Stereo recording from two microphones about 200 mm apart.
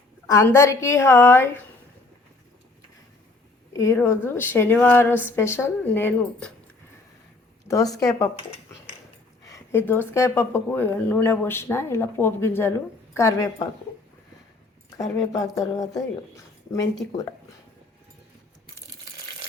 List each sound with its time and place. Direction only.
0.3 s speech: 15° left (ahead or behind)
3.7 s speech: 15° left (ahead or behind)
7.7 s speech: 15° left (ahead or behind)
9.5 s speech: 10° left (ahead or behind)
15.3 s speech: 15° left (ahead or behind)